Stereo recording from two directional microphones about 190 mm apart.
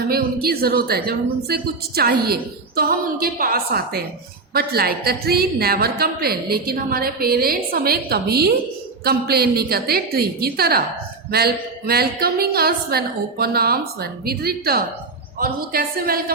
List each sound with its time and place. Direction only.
0.1 s a woman's voice: 55° right (ahead or behind)